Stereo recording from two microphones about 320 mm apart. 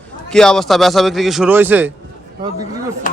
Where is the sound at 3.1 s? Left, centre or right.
Left.